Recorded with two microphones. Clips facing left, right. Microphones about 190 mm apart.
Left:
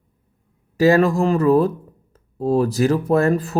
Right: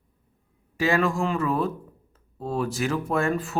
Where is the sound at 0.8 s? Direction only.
40° left (ahead or behind).